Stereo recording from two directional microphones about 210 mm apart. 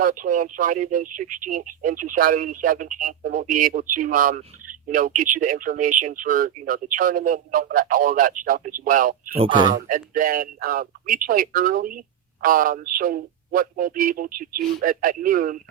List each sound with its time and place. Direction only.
0.0 s speech: 40° right (ahead or behind)